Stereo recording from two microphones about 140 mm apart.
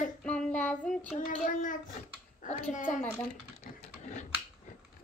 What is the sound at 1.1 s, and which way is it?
A child's voice, 70° left (ahead or behind).